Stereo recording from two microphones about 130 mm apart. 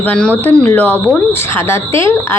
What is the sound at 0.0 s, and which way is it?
A woman's voice, 10° left (ahead or behind).